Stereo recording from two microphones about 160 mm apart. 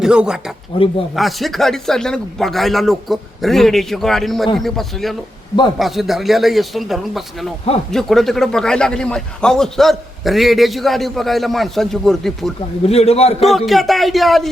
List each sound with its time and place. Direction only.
0.0 s a man's voice: 5° right (ahead or behind)
0.7 s a man's voice: 35° left (ahead or behind)
1.1 s a man's voice: centre (ahead or behind)
12.8 s a man's voice: 40° left (ahead or behind)
13.4 s a man's voice: centre (ahead or behind)